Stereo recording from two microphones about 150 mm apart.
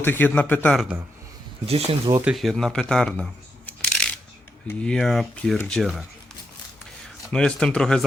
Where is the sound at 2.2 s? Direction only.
5° right (ahead or behind).